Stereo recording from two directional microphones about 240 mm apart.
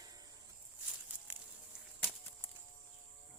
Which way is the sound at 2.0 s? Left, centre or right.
Centre.